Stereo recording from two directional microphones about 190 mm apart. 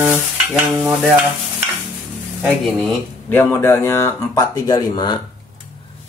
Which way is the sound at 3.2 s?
10° left (ahead or behind).